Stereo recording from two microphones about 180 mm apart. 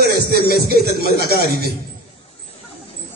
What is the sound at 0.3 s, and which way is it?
Music, 60° right (ahead or behind).